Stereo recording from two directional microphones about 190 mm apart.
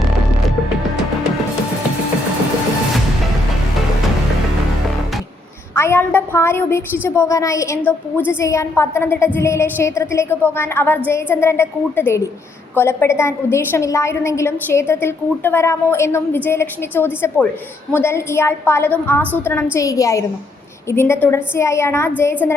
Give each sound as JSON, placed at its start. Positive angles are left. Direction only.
{"t": 5.7, "sound": "a woman's voice", "side_deg": 10}